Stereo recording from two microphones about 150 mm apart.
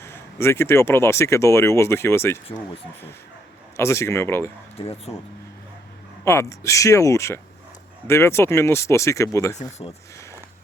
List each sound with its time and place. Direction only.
0.0 s speech: 15° left (ahead or behind)
3.8 s speech: 20° left (ahead or behind)
4.8 s speech: 45° left (ahead or behind)
6.2 s speech: 20° left (ahead or behind)
9.6 s speech: 50° left (ahead or behind)